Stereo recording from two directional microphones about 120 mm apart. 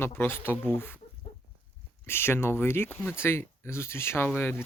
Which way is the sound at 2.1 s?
20° left (ahead or behind).